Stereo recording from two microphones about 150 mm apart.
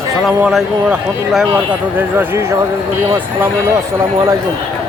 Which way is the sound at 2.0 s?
15° right (ahead or behind).